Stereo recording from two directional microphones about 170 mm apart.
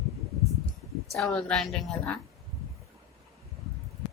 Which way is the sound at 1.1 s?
Centre (ahead or behind).